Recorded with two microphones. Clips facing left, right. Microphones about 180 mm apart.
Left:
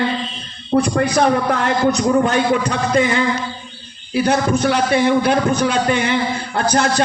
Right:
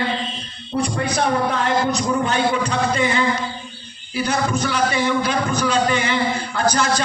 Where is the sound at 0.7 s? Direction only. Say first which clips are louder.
Left 6 dB; 65° left (ahead or behind).